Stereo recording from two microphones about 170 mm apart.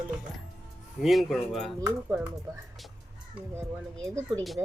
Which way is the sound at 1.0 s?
Centre (ahead or behind).